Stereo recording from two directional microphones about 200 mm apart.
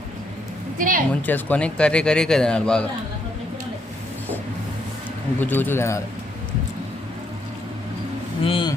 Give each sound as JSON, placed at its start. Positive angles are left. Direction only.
{"t": 0.8, "sound": "a woman's voice", "side_deg": -45}
{"t": 1.3, "sound": "speech", "side_deg": 5}
{"t": 5.4, "sound": "a man's voice", "side_deg": 10}
{"t": 8.4, "sound": "speech", "side_deg": 25}